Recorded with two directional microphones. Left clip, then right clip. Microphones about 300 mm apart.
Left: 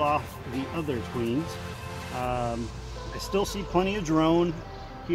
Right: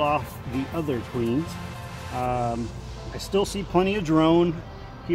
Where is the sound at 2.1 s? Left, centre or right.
Centre.